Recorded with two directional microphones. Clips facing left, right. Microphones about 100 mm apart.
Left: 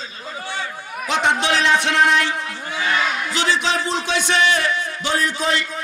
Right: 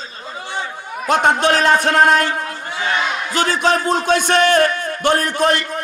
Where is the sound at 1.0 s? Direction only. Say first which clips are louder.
Right 5 dB; 50° right (ahead or behind).